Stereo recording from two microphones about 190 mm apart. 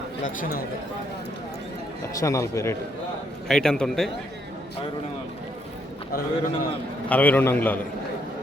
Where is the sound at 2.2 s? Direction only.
15° left (ahead or behind).